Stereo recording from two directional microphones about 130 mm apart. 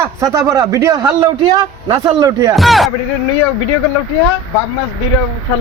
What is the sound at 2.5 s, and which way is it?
Speech, centre (ahead or behind).